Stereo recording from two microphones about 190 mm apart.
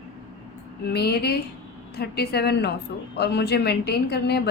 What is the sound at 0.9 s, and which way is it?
A woman's voice, 55° left (ahead or behind).